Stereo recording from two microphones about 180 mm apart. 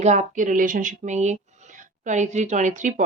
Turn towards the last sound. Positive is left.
turn(degrees=-45)  # may be behind; listen again after turning